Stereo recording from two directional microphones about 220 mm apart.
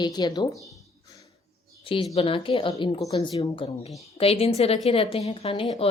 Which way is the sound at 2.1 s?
25° left (ahead or behind).